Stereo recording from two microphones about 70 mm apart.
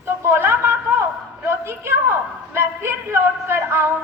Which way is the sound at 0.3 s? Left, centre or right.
Right.